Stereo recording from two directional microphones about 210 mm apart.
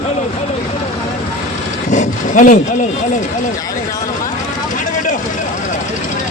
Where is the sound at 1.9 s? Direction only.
40° left (ahead or behind).